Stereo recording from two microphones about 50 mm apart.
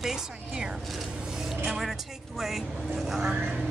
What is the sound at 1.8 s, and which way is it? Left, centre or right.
Speech, centre.